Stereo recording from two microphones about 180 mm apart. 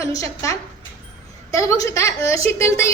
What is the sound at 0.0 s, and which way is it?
A woman's voice, 15° left (ahead or behind).